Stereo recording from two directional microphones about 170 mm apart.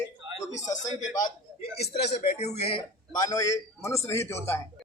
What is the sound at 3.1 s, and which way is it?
A man's voice, 20° left (ahead or behind).